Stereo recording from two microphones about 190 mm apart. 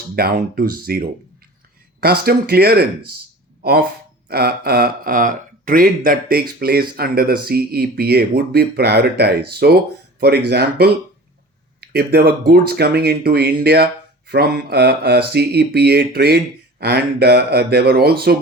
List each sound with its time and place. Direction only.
0.2 s speech: 50° right (ahead or behind)
4.3 s speech: 55° right (ahead or behind)